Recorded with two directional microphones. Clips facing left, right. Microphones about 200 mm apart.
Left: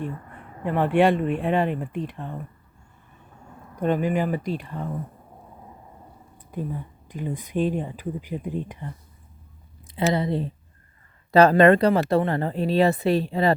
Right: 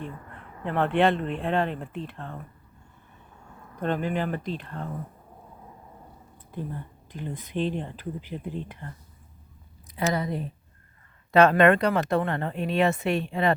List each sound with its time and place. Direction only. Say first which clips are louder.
0.6 s speech: left 3 dB; 10° left (ahead or behind)
3.8 s speech: left 4 dB; 10° left (ahead or behind)
6.5 s speech: left 4 dB; 10° left (ahead or behind)
9.8 s speech: left 4 dB; 25° left (ahead or behind)